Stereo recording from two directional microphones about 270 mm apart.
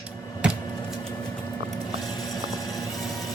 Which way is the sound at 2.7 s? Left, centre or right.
Centre.